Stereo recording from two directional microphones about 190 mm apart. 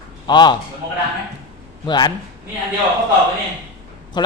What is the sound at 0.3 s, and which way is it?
Speech, 25° left (ahead or behind).